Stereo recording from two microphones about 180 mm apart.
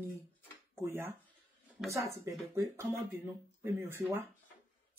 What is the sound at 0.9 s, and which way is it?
Speech, 10° right (ahead or behind).